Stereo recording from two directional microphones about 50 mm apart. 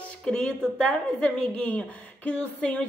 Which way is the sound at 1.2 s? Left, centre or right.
Left.